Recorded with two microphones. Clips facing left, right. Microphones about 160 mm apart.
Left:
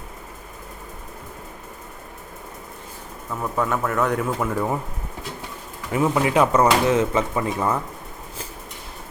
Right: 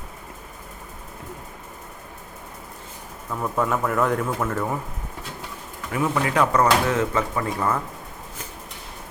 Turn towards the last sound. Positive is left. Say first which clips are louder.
# left 1 dB
turn(degrees=20)  # may be behind; listen again after turning